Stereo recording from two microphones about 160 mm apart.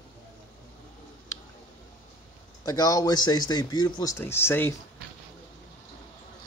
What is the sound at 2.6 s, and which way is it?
Speech, 25° left (ahead or behind).